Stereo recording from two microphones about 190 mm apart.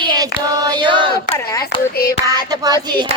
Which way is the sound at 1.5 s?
20° left (ahead or behind).